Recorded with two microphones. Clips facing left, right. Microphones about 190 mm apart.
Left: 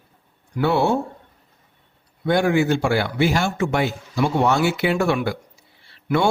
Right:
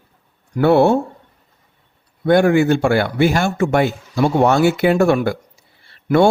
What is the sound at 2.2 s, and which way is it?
Speech, 55° right (ahead or behind).